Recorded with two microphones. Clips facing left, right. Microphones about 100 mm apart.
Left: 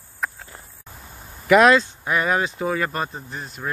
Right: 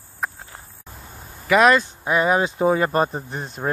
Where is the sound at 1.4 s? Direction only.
5° right (ahead or behind).